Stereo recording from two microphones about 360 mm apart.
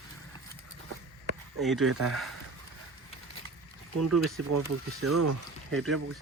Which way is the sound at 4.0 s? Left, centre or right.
Right.